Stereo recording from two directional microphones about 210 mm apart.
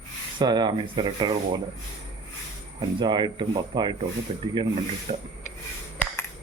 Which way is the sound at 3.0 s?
20° right (ahead or behind).